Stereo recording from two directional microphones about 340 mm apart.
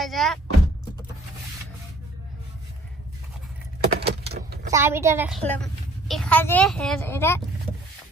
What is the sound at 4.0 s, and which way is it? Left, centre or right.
Vehicle, right.